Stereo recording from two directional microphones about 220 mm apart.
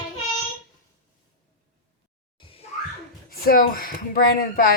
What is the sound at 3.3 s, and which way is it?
A woman's voice, 40° left (ahead or behind).